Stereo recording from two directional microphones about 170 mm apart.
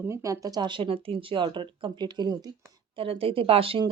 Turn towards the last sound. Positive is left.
turn(degrees=-30)  # may be behind; listen again after turning